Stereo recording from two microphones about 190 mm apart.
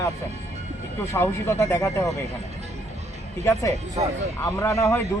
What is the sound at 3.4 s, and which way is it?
Speech, 15° left (ahead or behind).